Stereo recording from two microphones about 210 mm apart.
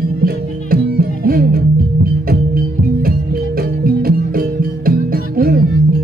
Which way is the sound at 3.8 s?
45° right (ahead or behind).